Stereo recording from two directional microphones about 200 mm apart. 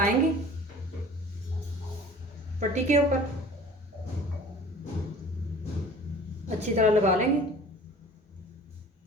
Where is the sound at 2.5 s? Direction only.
35° right (ahead or behind).